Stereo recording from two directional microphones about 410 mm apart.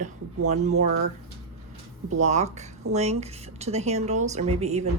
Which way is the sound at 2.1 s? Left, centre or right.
Centre.